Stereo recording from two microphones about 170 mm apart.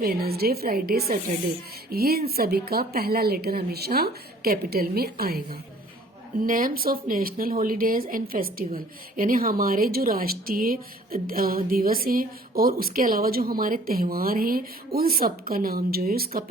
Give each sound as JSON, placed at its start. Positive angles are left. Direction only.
{"t": 0.0, "sound": "a woman's voice", "side_deg": -60}
{"t": 1.0, "sound": "speech", "side_deg": -50}
{"t": 1.9, "sound": "a woman's voice", "side_deg": -65}
{"t": 6.4, "sound": "a woman's voice", "side_deg": -55}